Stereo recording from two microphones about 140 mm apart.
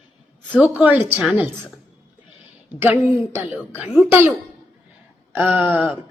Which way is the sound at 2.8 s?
20° right (ahead or behind).